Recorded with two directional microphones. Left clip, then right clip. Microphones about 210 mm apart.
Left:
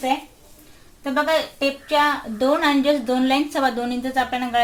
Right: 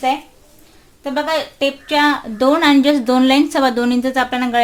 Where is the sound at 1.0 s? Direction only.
40° right (ahead or behind).